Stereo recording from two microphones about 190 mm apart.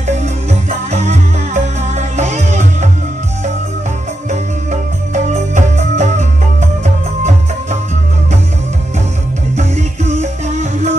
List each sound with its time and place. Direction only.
0.0 s music: 35° right (ahead or behind)
4.3 s music: 40° right (ahead or behind)
9.6 s music: 35° right (ahead or behind)